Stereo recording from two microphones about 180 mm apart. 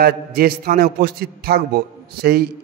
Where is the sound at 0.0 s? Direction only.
55° right (ahead or behind).